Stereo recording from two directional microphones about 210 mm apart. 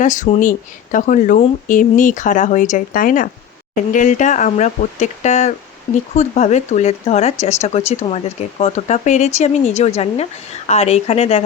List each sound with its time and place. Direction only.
0.0 s speech: 35° left (ahead or behind)